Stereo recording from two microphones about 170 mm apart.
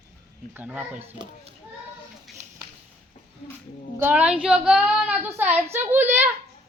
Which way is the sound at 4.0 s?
10° right (ahead or behind).